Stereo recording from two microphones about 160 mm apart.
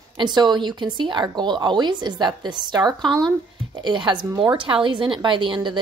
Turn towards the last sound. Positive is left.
turn(degrees=-30)  # may be behind; listen again after turning